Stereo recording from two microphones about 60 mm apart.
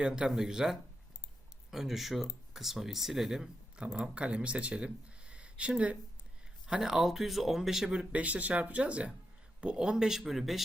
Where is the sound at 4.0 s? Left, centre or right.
Centre.